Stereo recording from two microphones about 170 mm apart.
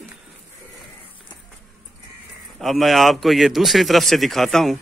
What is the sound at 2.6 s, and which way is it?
Speech, centre (ahead or behind).